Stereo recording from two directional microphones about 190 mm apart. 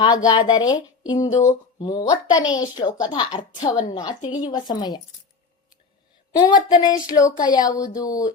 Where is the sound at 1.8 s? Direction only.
20° left (ahead or behind).